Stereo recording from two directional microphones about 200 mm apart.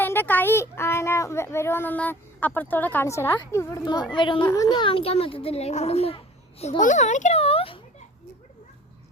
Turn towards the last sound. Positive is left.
turn(degrees=30)  # may be behind; listen again after turning